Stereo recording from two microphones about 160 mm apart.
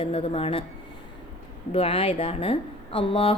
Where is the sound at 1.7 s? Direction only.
35° left (ahead or behind).